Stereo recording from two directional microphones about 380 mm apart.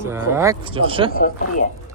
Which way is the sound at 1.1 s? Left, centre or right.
Left.